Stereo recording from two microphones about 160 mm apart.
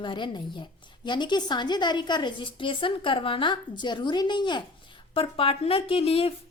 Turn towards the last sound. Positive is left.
turn(degrees=35)  # may be behind; listen again after turning